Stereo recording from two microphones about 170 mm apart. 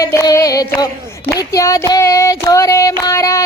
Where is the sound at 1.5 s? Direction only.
20° left (ahead or behind).